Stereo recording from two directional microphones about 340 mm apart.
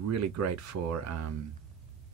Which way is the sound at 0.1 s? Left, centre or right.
Right.